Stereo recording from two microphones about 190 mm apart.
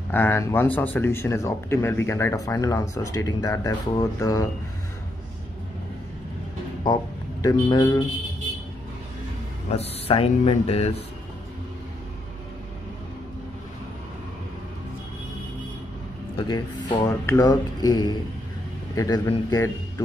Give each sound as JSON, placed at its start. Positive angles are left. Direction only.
{"t": 0.1, "sound": "speech", "side_deg": 10}
{"t": 6.8, "sound": "speech", "side_deg": 20}
{"t": 9.7, "sound": "speech", "side_deg": 30}
{"t": 16.3, "sound": "speech", "side_deg": 20}